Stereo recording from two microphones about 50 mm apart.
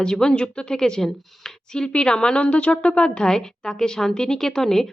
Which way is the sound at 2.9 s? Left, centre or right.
Centre.